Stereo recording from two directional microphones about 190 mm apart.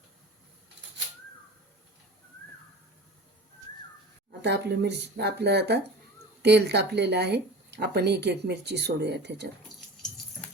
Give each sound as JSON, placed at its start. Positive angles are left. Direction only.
{"t": 4.4, "sound": "speech", "side_deg": -65}